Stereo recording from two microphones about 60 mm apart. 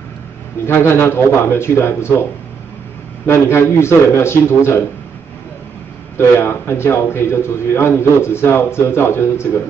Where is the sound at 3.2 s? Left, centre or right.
Left.